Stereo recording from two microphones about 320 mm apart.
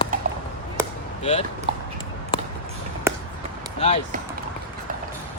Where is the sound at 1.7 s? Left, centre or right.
Centre.